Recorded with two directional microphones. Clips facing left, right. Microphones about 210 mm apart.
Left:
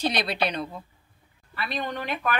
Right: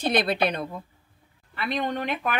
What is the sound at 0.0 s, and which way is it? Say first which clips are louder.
Speech: right 3 dB; 50° right (ahead or behind).